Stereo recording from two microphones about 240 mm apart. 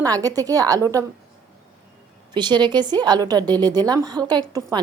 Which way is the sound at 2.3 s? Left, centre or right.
Centre.